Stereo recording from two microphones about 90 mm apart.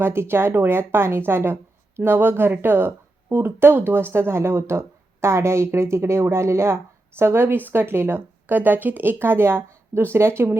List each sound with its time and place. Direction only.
0.0 s speech: 25° right (ahead or behind)